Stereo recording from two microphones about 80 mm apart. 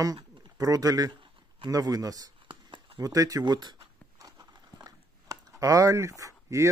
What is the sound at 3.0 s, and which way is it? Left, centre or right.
Speech, right.